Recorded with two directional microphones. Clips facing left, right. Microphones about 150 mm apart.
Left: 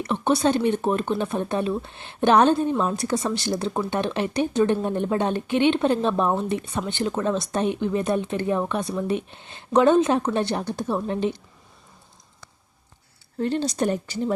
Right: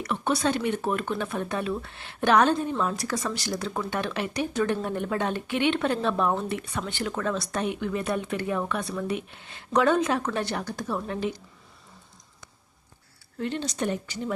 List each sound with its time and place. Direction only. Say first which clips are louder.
0.0 s speech: left 5 dB; 25° left (ahead or behind)
13.4 s speech: left 6 dB; 35° left (ahead or behind)